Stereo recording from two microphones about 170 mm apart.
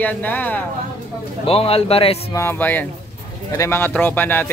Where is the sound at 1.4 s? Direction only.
35° left (ahead or behind).